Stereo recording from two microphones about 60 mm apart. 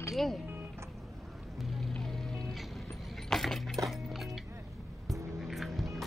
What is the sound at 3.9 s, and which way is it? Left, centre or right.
Music, centre.